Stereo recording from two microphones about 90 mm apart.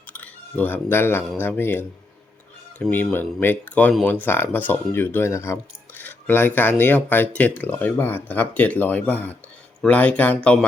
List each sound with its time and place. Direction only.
0.1 s music: 20° left (ahead or behind)
1.4 s speech: 25° left (ahead or behind)
2.9 s speech: 20° left (ahead or behind)